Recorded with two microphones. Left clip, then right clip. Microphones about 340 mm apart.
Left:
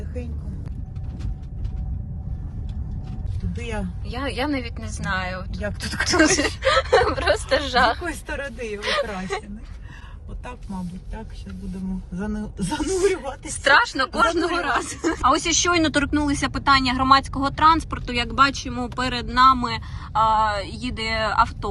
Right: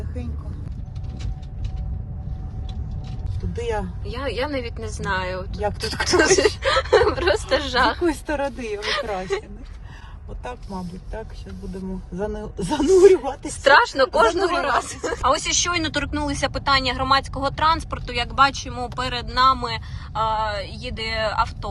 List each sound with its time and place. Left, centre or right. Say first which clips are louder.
3.6 s speech: right 6 dB; right
4.0 s speech: left 3 dB; centre
5.6 s speech: right 2 dB; right
6.3 s speech: right 2 dB; centre
8.0 s speech: right 6 dB; right
8.8 s speech: left 1 dB; centre
10.4 s speech: right 3 dB; right
13.5 s speech: right 2 dB; centre